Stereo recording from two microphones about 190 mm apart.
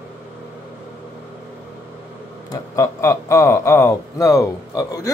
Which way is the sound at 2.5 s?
15° left (ahead or behind).